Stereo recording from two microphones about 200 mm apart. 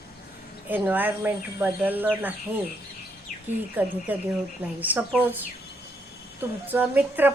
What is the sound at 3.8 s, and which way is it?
A woman's voice, 10° right (ahead or behind).